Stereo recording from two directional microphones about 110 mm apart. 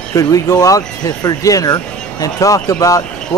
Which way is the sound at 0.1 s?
30° left (ahead or behind).